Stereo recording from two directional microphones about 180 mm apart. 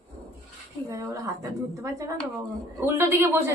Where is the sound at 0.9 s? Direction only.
15° right (ahead or behind).